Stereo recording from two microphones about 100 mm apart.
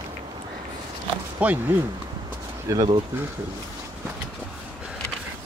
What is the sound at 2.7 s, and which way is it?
Speech, 30° right (ahead or behind).